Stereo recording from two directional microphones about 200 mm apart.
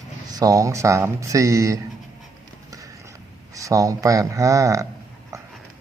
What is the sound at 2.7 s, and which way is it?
Clip-clop, 15° right (ahead or behind).